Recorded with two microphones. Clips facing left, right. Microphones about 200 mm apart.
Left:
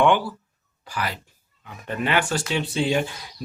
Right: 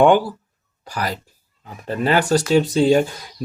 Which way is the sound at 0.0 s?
40° right (ahead or behind).